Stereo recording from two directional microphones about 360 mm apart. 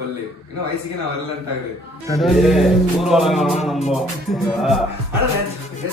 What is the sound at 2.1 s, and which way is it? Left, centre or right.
Music, centre.